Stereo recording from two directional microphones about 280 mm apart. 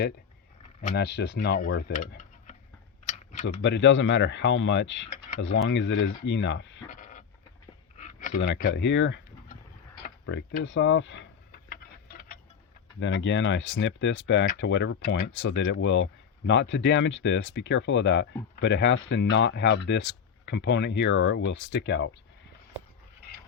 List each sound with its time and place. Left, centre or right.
0.8 s speech: left
3.4 s speech: left
6.9 s a sound: left
8.6 s speech: left
10.0 s a sound: left
13.0 s speech: left